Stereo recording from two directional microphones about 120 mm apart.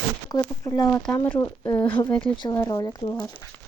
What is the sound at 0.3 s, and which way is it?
Speech, 30° left (ahead or behind).